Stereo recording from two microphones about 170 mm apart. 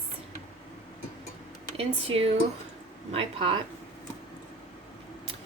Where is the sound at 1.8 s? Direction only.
35° right (ahead or behind).